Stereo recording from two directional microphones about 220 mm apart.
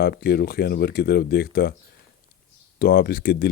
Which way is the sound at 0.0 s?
45° left (ahead or behind).